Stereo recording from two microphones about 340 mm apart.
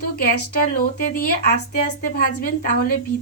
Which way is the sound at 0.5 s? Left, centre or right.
Left.